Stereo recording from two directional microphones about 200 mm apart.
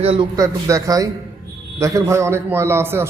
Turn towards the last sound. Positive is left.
turn(degrees=-10)  # may be behind; listen again after turning